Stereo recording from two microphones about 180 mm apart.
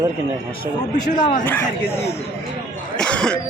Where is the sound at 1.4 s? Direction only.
10° left (ahead or behind).